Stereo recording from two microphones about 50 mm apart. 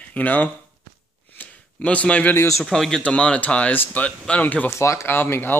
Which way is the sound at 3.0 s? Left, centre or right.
Left.